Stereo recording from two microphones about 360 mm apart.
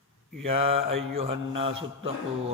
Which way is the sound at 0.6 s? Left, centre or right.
Centre.